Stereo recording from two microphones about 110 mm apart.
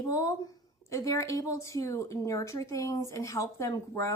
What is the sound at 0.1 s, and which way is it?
Speech, 30° left (ahead or behind).